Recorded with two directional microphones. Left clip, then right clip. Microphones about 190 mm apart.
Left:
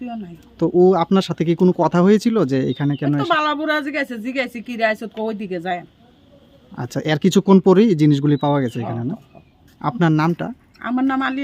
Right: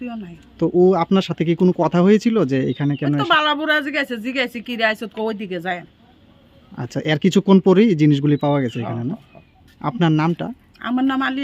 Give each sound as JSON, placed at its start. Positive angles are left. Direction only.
{"t": 0.0, "sound": "speech", "side_deg": -5}